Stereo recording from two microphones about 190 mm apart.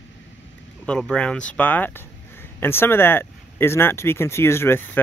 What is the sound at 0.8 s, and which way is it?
Speech, 5° left (ahead or behind).